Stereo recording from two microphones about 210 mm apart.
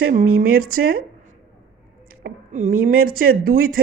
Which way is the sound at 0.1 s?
45° right (ahead or behind).